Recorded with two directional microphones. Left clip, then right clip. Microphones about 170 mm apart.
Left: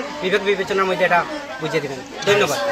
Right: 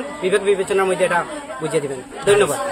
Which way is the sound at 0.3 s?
35° right (ahead or behind).